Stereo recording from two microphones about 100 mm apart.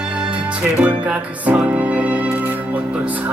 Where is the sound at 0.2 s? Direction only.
10° right (ahead or behind).